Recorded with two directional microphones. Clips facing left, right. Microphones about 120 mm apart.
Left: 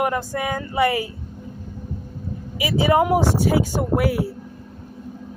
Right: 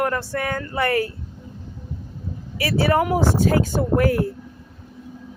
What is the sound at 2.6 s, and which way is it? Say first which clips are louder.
Speech: left 1 dB; 15° left (ahead or behind).